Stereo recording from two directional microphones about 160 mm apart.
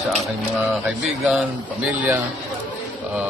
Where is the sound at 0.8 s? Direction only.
5° right (ahead or behind).